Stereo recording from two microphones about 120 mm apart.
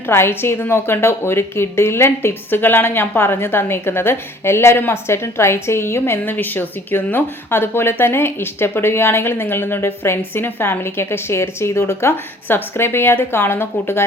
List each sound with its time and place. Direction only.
0.1 s a woman's voice: 20° left (ahead or behind)